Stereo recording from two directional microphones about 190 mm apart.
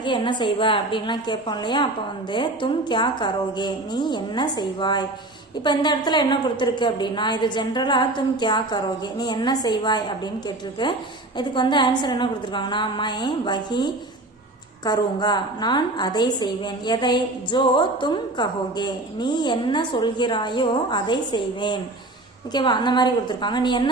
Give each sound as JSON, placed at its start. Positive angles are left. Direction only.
{"t": 0.0, "sound": "a woman's voice", "side_deg": 25}